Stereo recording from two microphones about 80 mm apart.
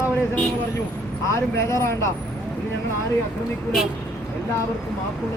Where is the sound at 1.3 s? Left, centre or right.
Left.